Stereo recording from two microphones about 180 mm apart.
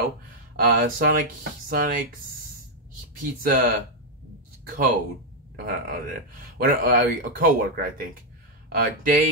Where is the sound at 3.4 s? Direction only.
50° right (ahead or behind).